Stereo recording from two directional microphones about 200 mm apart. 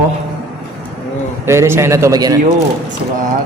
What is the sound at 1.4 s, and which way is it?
Speech, 15° right (ahead or behind).